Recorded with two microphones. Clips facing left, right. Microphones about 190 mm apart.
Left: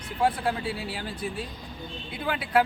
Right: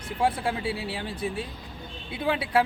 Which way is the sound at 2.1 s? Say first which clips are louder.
Right 1 dB; 25° right (ahead or behind).